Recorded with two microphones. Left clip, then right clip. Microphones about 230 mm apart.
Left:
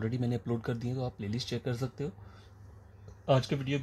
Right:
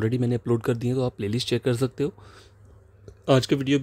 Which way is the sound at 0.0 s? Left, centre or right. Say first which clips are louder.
Right 9 dB; right.